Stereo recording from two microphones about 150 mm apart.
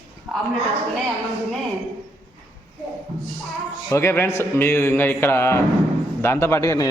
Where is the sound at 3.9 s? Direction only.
15° left (ahead or behind).